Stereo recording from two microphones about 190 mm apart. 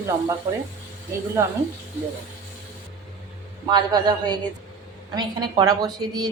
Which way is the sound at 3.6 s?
20° right (ahead or behind).